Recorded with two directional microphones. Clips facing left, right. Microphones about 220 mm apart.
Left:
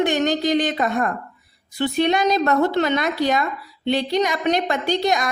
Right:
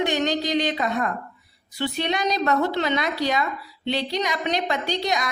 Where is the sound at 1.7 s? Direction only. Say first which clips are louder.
Left 6 dB; 50° left (ahead or behind).